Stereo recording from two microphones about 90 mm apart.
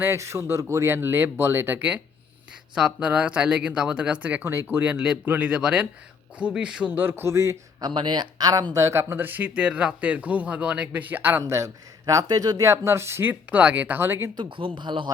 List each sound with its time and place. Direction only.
0.0 s speech: 30° right (ahead or behind); by 6.9 s 10° right (ahead or behind)
6.9 s speech: 25° right (ahead or behind)
7.8 s speech: 55° right (ahead or behind)
8.7 s speech: 35° right (ahead or behind)
12.7 s speech: 30° right (ahead or behind)
14.3 s speech: 75° right (ahead or behind)
14.8 s speech: 60° right (ahead or behind)